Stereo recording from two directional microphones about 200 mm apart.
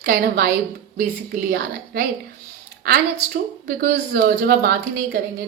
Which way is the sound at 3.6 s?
40° right (ahead or behind).